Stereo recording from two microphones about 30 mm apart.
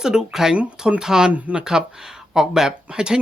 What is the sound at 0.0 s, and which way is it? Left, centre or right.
Speech, right.